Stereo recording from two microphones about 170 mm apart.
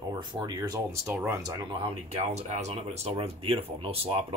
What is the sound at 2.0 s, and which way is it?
Speech, 40° right (ahead or behind).